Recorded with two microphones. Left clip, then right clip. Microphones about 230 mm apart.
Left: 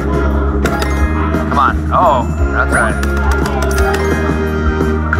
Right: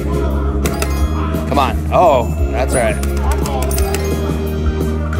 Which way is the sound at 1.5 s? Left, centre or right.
Right.